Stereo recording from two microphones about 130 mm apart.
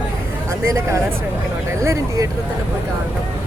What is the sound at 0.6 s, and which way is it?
Speech, 25° right (ahead or behind).